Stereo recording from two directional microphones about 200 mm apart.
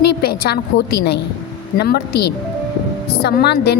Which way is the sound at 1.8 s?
55° left (ahead or behind).